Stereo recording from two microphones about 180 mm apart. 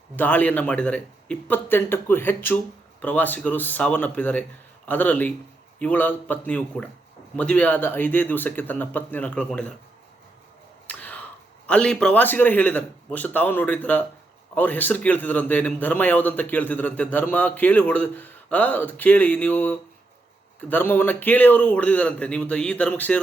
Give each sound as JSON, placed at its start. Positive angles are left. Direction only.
{"t": 0.2, "sound": "a man's voice", "side_deg": 10}
{"t": 10.8, "sound": "a sound", "side_deg": 10}
{"t": 11.6, "sound": "a man's voice", "side_deg": 5}